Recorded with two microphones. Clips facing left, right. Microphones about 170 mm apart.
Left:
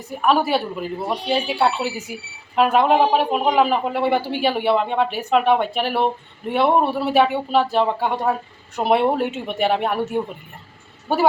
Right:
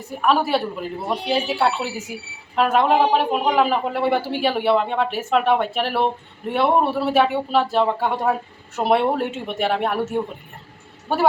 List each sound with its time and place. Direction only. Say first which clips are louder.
0.0 s speech: left 1 dB; centre (ahead or behind)